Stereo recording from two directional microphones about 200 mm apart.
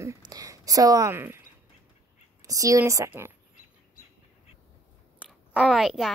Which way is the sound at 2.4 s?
15° right (ahead or behind).